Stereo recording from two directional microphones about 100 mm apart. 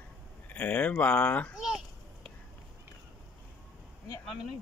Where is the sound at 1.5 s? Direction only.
5° right (ahead or behind).